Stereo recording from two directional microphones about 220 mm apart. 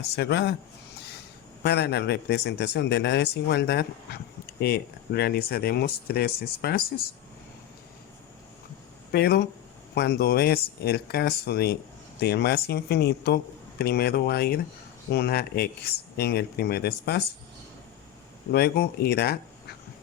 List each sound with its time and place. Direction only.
0.2 s a man's voice: 50° left (ahead or behind)
0.9 s a sound: 45° left (ahead or behind)
1.6 s a man's voice: 50° left (ahead or behind)
9.1 s a man's voice: 45° left (ahead or behind)
18.5 s a man's voice: 45° left (ahead or behind)